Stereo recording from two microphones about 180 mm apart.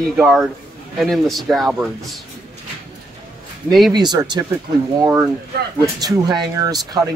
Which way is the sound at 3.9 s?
20° right (ahead or behind).